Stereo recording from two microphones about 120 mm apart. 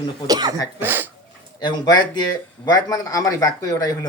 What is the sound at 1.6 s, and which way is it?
Speech, 35° left (ahead or behind).